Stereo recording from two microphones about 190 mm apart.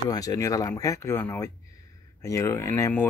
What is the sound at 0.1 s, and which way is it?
Speech, 20° left (ahead or behind).